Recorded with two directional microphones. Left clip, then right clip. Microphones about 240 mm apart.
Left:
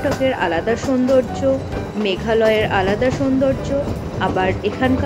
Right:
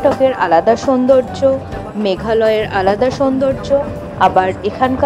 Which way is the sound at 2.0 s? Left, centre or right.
Right.